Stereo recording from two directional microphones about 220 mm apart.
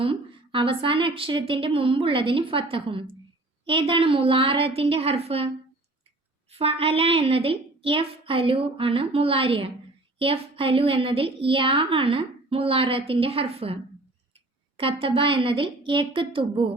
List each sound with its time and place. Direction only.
0.0 s a woman's voice: 25° right (ahead or behind)
6.5 s a woman's voice: 25° right (ahead or behind)
14.8 s a woman's voice: 25° right (ahead or behind)